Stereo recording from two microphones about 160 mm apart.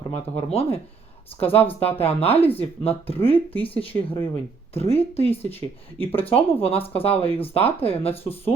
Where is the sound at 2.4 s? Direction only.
10° left (ahead or behind).